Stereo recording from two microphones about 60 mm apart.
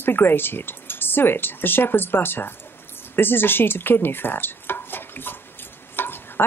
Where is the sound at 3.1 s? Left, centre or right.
Left.